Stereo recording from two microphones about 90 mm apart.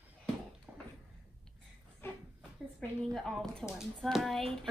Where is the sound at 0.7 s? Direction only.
15° right (ahead or behind).